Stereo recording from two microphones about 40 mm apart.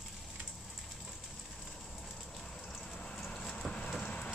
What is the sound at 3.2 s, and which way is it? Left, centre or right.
Vehicle, centre.